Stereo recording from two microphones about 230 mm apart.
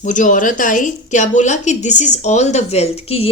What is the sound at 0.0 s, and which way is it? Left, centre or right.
A woman's voice, left.